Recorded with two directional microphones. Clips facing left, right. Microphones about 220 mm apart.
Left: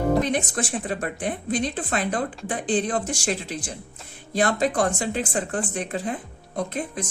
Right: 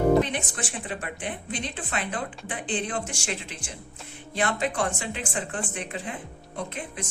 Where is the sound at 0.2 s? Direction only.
40° left (ahead or behind).